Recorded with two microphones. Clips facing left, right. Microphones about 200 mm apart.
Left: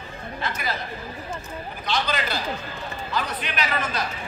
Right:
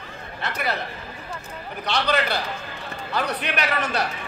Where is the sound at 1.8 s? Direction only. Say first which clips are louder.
Right 3 dB; 65° right (ahead or behind).